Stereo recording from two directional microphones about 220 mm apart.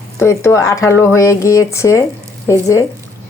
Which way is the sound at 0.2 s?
10° left (ahead or behind).